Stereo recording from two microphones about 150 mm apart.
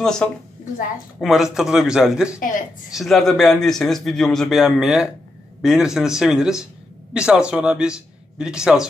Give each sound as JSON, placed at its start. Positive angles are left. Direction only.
{"t": 0.0, "sound": "speech", "side_deg": 5}